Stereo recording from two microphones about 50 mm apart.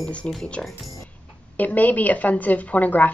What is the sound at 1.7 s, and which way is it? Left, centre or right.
A woman's voice, left.